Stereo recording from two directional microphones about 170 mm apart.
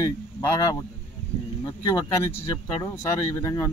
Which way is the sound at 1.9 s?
25° left (ahead or behind).